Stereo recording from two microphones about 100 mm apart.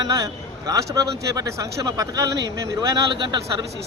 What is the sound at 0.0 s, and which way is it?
Speech, 40° right (ahead or behind).